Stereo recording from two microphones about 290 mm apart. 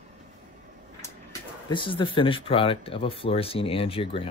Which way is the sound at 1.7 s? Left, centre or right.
Centre.